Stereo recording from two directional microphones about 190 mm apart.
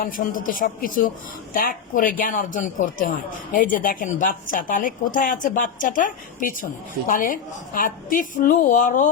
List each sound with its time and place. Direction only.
0.0 s speech: 45° left (ahead or behind)